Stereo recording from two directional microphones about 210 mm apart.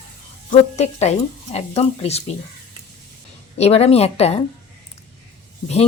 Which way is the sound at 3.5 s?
30° left (ahead or behind).